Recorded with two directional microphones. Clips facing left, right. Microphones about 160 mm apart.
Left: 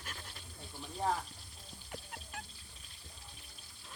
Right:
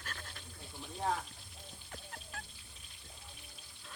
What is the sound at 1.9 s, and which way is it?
Music, 15° left (ahead or behind).